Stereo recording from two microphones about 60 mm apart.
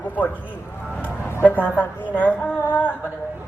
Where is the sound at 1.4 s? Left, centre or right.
Left.